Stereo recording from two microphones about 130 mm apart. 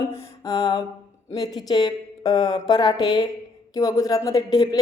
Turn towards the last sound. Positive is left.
turn(degrees=30)  # may be behind; listen again after turning